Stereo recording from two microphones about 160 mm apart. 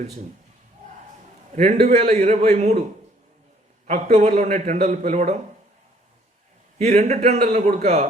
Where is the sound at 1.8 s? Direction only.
45° right (ahead or behind).